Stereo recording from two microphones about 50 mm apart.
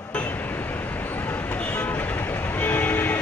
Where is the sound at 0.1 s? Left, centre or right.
Left.